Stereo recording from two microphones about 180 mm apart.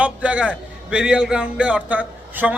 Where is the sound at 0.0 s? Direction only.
5° right (ahead or behind).